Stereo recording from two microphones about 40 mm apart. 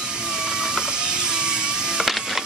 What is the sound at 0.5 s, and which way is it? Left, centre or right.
Power windows, right.